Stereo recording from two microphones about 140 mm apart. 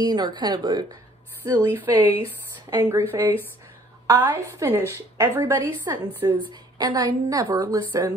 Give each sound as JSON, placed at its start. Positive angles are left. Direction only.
{"t": 0.0, "sound": "speech", "side_deg": -30}
{"t": 1.4, "sound": "a woman's voice", "side_deg": -15}